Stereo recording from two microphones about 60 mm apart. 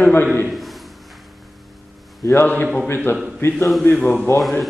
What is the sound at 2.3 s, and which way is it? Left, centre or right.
Speech, left.